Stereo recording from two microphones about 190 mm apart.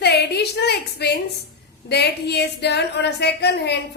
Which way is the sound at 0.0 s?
60° left (ahead or behind).